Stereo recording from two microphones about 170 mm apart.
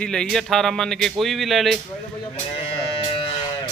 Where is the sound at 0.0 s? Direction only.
5° left (ahead or behind).